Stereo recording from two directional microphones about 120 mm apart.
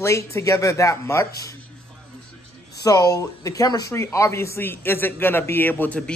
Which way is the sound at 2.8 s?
30° left (ahead or behind).